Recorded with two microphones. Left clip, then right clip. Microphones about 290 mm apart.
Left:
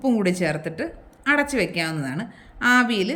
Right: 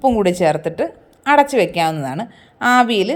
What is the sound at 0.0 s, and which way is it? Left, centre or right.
Speech, centre.